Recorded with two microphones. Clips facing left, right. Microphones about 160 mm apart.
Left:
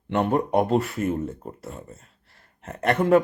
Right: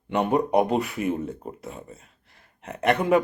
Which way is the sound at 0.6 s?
15° right (ahead or behind).